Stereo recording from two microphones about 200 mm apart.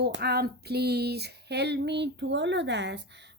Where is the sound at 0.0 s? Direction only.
55° right (ahead or behind).